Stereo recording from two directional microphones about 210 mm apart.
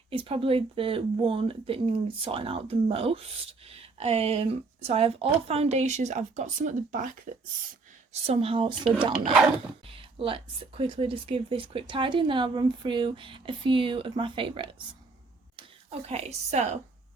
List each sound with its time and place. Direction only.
0.1 s speech: 25° right (ahead or behind)
8.1 s speech: 30° right (ahead or behind)
9.9 s speech: 25° right (ahead or behind)